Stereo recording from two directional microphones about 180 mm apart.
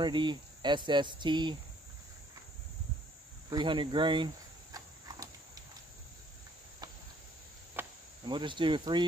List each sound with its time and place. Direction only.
0.0 s speech: 25° right (ahead or behind)
3.4 s speech: 25° right (ahead or behind)
4.7 s a sound: 20° right (ahead or behind)
7.8 s cricket: 10° right (ahead or behind)
8.3 s speech: 25° right (ahead or behind)